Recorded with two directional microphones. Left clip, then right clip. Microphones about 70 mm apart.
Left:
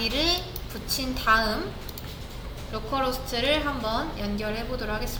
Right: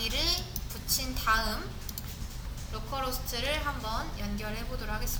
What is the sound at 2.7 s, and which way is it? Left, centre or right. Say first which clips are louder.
A woman's voice: left 8 dB; right.